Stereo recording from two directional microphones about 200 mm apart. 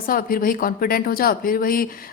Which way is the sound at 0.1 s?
45° left (ahead or behind).